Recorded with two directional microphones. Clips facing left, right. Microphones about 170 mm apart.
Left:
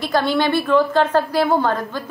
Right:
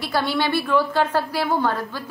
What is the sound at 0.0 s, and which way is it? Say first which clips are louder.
A woman's voice: left 4 dB; 10° right (ahead or behind).